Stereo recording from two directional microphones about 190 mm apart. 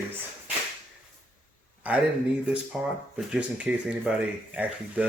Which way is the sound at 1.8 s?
5° right (ahead or behind).